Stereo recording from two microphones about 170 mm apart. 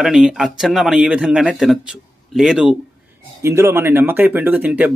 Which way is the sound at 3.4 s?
15° right (ahead or behind).